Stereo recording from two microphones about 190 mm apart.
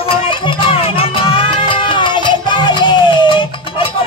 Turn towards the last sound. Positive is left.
turn(degrees=25)  # may be behind; listen again after turning